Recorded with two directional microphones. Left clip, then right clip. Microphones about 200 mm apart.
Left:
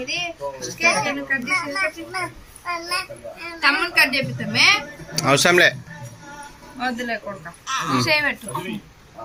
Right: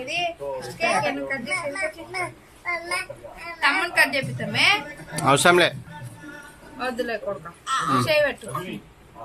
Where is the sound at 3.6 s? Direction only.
20° right (ahead or behind).